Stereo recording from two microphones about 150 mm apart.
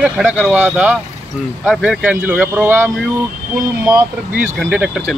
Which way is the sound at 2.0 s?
10° right (ahead or behind).